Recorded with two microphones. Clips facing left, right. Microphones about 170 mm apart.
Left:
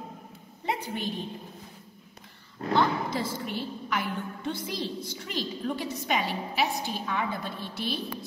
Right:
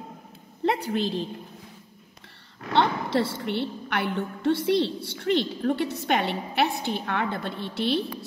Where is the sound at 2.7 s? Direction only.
65° right (ahead or behind).